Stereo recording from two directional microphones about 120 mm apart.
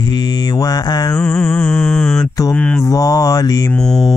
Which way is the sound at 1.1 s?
5° left (ahead or behind).